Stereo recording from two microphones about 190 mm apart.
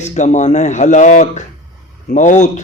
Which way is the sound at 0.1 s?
40° left (ahead or behind).